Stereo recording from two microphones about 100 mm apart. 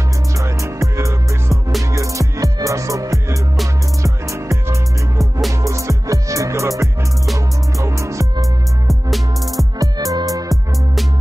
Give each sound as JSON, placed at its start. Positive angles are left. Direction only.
{"t": 0.4, "sound": "music", "side_deg": -30}
{"t": 8.8, "sound": "music", "side_deg": 0}
{"t": 9.8, "sound": "music", "side_deg": -40}